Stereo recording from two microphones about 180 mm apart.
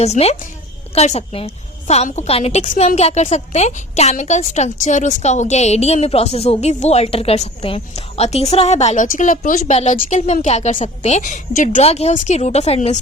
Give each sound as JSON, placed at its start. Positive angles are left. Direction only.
{"t": 0.0, "sound": "a woman's voice", "side_deg": 35}